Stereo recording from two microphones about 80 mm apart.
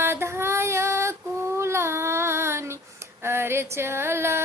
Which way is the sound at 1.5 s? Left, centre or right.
Right.